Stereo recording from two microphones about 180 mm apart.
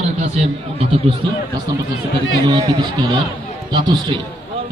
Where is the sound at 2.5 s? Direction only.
25° right (ahead or behind).